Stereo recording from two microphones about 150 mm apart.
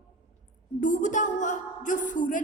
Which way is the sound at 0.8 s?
55° left (ahead or behind).